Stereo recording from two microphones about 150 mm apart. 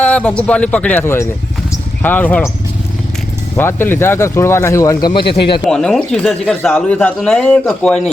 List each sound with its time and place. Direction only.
0.0 s speech: 10° left (ahead or behind)
3.5 s speech: 15° left (ahead or behind)
5.3 s speech: 35° left (ahead or behind)
5.6 s speech: 5° left (ahead or behind)